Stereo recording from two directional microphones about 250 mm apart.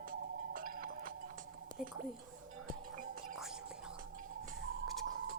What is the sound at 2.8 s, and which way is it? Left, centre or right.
Music, right.